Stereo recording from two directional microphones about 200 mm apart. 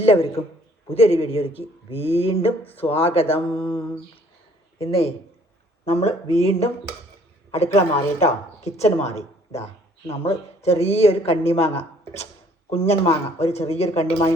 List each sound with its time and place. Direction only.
0.0 s speech: 30° left (ahead or behind)
2.5 s speech: 10° left (ahead or behind)
2.8 s a man's voice: 30° left (ahead or behind)